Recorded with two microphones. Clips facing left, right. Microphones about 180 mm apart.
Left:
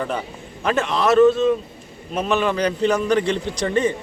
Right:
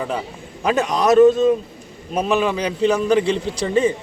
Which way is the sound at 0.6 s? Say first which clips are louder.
Right 2 dB; 10° right (ahead or behind).